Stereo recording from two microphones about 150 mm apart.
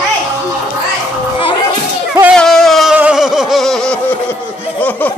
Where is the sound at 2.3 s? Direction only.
5° left (ahead or behind).